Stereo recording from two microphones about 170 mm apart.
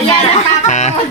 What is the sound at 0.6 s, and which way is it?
Music, 40° left (ahead or behind).